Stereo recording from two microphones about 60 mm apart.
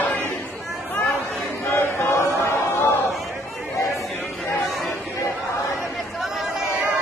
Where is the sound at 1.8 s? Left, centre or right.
Left.